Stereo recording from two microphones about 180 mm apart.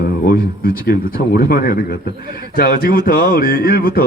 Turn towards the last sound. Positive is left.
turn(degrees=55)  # may be behind; listen again after turning